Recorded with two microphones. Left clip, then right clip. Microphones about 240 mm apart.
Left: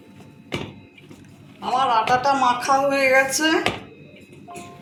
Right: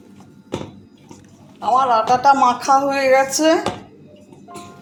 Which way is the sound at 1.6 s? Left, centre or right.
Right.